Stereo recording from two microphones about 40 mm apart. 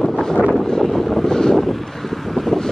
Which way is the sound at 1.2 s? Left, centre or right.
Centre.